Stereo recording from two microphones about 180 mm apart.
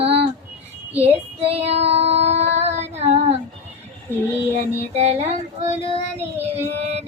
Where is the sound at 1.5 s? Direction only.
35° right (ahead or behind).